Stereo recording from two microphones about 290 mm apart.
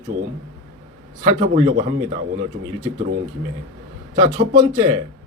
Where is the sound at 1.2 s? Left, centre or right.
Right.